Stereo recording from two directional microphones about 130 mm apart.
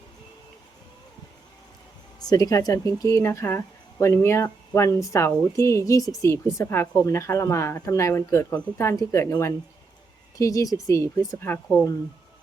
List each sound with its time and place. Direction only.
2.2 s speech: 30° left (ahead or behind)